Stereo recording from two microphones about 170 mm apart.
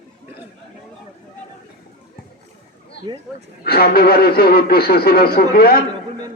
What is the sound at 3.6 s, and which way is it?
Speech, 65° left (ahead or behind).